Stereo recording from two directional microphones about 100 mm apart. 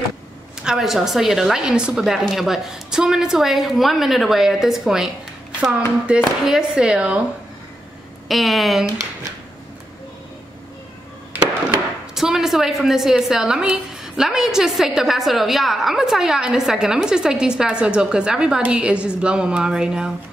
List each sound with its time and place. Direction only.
0.7 s a woman's voice: 5° right (ahead or behind)
8.3 s a woman's voice: centre (ahead or behind)
11.3 s a sound: 20° right (ahead or behind)
12.2 s a woman's voice: 5° right (ahead or behind)